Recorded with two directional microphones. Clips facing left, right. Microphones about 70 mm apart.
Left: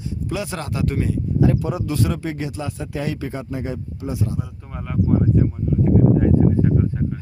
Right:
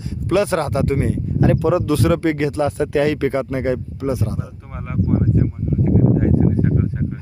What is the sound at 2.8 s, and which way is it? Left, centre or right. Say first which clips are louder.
Speech: right 9 dB; right.